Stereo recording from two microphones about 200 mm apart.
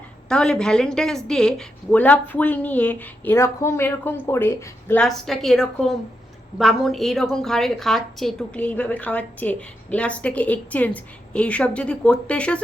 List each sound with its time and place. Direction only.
0.3 s a woman's voice: 5° left (ahead or behind)